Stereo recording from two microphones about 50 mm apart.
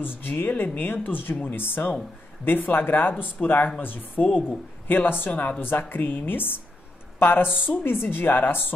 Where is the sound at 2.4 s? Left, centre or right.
Left.